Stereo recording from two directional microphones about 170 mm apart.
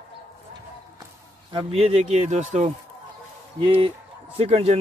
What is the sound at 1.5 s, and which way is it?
Speech, 35° right (ahead or behind).